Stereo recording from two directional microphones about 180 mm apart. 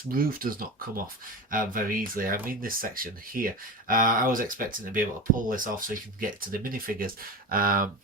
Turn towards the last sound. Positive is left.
turn(degrees=-50)  # may be behind; listen again after turning